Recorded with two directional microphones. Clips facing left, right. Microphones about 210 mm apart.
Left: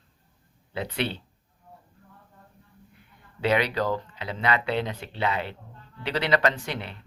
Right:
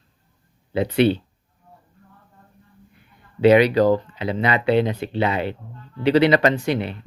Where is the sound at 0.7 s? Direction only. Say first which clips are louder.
Right 12 dB; 15° right (ahead or behind).